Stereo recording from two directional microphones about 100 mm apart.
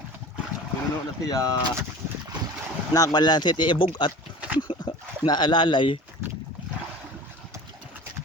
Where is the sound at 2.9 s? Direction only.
35° left (ahead or behind); by 4.1 s 55° left (ahead or behind).